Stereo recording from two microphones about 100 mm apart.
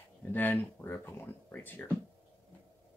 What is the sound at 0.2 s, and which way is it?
Speech, 20° left (ahead or behind).